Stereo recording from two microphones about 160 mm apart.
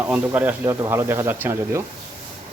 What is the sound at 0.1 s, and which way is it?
Speech, 10° right (ahead or behind).